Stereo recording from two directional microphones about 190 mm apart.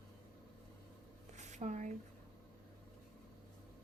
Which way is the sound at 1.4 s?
40° right (ahead or behind).